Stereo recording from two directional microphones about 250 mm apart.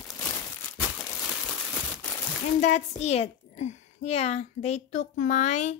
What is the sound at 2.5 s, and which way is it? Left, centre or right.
A woman's voice, left.